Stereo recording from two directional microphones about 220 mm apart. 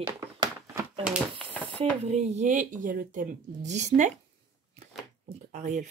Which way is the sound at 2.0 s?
30° right (ahead or behind).